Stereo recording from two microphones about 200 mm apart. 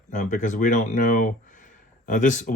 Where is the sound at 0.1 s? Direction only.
40° left (ahead or behind).